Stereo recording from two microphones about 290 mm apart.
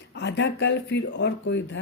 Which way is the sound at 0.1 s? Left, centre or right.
Left.